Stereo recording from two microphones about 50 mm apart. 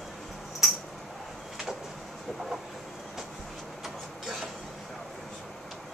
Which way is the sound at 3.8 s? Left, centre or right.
Centre.